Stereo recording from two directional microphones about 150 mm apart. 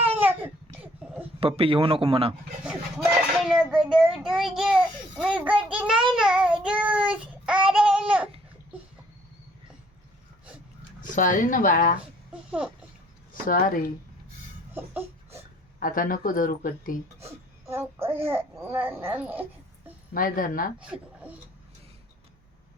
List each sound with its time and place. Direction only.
0.0 s baby cry: 10° right (ahead or behind)
1.4 s a man's voice: 40° right (ahead or behind)
3.4 s child singing: 5° right (ahead or behind)
3.9 s a child's voice: 5° right (ahead or behind)
6.1 s child singing: 5° right (ahead or behind)
11.1 s speech: 60° left (ahead or behind)
12.3 s a sound: 10° right (ahead or behind)
13.5 s speech: 70° left (ahead or behind)
15.8 s speech: 65° left (ahead or behind)
17.7 s a child's voice: 15° right (ahead or behind)
20.1 s speech: 70° left (ahead or behind)
20.7 s a child's voice: 5° right (ahead or behind)